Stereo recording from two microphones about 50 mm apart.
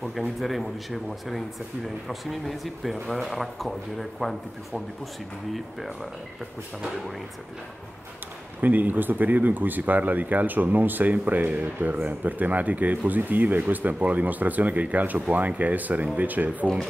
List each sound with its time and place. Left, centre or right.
0.0 s speech: centre
8.5 s speech: right